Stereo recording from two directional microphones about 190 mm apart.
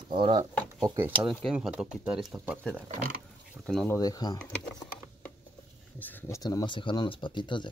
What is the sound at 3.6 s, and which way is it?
Speech, 5° left (ahead or behind).